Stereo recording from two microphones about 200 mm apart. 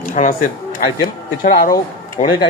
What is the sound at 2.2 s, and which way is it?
Speech, 35° left (ahead or behind).